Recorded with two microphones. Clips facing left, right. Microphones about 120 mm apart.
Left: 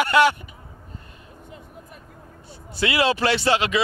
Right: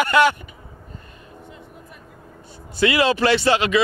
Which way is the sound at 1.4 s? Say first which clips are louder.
Left 2 dB; 45° left (ahead or behind).